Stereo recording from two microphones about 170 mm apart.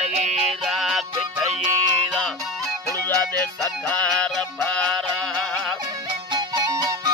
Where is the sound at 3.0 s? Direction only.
10° left (ahead or behind).